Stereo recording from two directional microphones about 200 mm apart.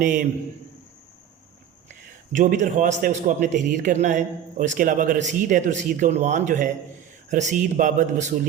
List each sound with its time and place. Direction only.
0.0 s a man's voice: 40° right (ahead or behind)
2.3 s a man's voice: 40° right (ahead or behind)